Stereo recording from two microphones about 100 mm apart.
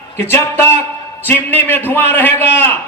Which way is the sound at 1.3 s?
20° left (ahead or behind).